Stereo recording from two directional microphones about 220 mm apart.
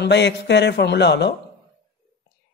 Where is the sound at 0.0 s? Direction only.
50° left (ahead or behind).